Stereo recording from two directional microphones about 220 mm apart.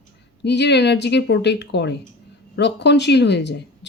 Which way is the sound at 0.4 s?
50° left (ahead or behind).